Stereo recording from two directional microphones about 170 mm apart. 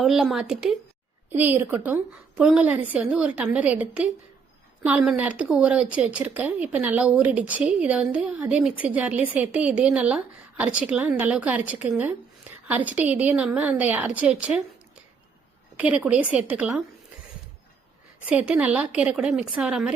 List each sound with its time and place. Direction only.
0.0 s a woman's voice: centre (ahead or behind)
15.8 s a woman's voice: 5° right (ahead or behind)
18.3 s speech: 5° right (ahead or behind)